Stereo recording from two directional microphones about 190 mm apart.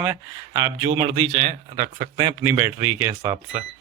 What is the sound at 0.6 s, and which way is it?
A man's voice, 20° right (ahead or behind).